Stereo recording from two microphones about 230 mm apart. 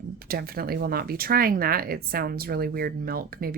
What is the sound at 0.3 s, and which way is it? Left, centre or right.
Speech, right.